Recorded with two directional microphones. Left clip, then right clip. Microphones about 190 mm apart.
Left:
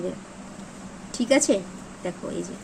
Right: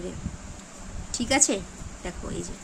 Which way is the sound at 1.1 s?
10° right (ahead or behind).